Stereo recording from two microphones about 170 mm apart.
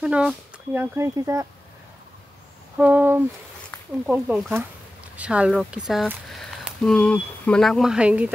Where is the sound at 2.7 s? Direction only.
10° right (ahead or behind).